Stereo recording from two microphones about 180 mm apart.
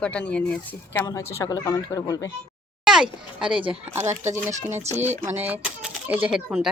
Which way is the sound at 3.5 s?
30° right (ahead or behind).